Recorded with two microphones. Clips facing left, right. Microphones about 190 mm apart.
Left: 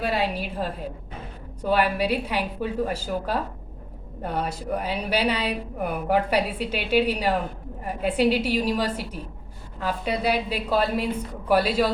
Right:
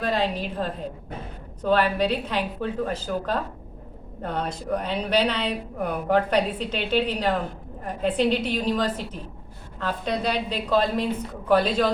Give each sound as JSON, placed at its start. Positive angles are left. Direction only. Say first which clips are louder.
{"t": 0.0, "sound": "a woman's voice", "louder": "right 1 dB", "side_deg": 10}